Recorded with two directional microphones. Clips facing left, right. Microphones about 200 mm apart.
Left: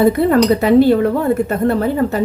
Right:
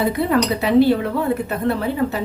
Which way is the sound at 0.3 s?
50° left (ahead or behind).